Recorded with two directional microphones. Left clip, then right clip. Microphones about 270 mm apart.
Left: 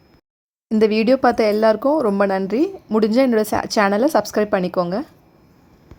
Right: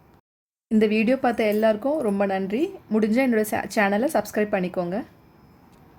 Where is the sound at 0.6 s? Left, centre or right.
Centre.